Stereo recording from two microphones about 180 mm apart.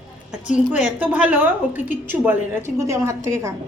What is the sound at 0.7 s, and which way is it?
A woman's voice, 10° right (ahead or behind).